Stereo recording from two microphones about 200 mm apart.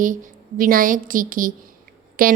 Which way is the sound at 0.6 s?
45° right (ahead or behind).